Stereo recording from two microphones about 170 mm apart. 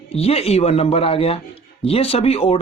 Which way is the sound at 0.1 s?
35° left (ahead or behind).